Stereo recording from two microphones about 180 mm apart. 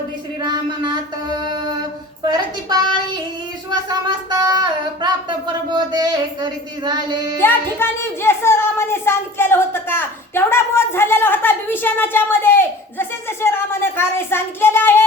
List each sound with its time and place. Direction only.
0.4 s music: 25° right (ahead or behind)
2.2 s music: 25° right (ahead or behind)
3.7 s speech: 25° right (ahead or behind)
5.7 s music: 25° right (ahead or behind)
7.3 s speech: 10° left (ahead or behind)